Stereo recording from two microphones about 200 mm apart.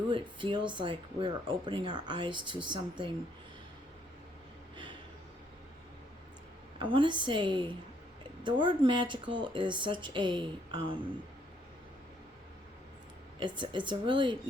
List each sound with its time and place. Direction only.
0.1 s speech: 25° right (ahead or behind)
6.7 s speech: 25° right (ahead or behind)
13.4 s speech: 25° right (ahead or behind)